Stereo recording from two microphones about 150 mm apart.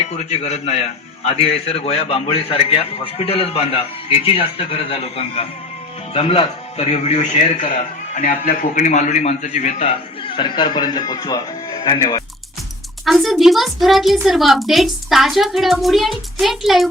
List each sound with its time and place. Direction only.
0.0 s a man's voice: 45° left (ahead or behind)
10.2 s speech: 35° left (ahead or behind)
13.1 s a woman's voice: centre (ahead or behind)